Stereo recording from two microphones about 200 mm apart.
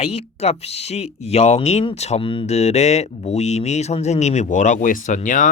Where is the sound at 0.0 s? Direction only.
30° left (ahead or behind).